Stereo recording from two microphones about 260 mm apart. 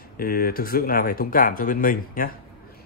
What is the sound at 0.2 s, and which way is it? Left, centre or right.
Speech, left.